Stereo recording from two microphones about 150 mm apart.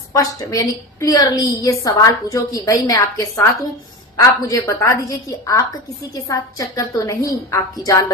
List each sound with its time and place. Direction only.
0.1 s a woman's voice: 25° left (ahead or behind)